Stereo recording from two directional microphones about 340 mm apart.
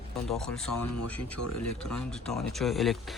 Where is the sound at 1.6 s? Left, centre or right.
Left.